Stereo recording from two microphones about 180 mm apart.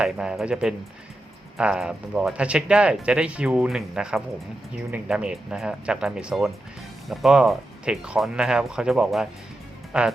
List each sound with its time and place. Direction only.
0.0 s speech: 5° right (ahead or behind)